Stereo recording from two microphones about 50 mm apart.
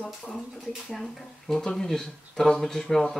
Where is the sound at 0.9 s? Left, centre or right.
Centre.